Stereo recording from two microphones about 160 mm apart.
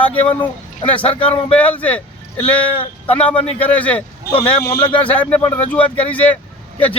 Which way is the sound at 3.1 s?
10° left (ahead or behind).